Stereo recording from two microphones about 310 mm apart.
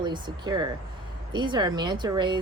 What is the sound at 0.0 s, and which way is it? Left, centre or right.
Speech, centre.